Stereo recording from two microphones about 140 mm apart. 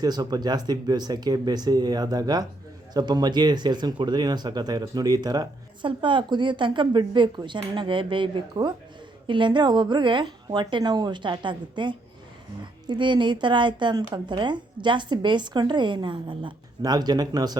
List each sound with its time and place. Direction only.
0.0 s speech: 30° right (ahead or behind)